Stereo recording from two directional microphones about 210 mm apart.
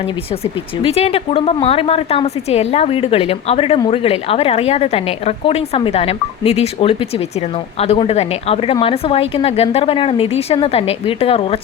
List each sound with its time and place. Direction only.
0.8 s a woman's voice: 30° left (ahead or behind)